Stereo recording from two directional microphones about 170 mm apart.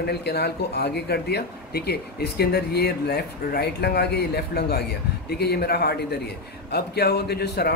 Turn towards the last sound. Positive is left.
turn(degrees=70)  # may be behind; listen again after turning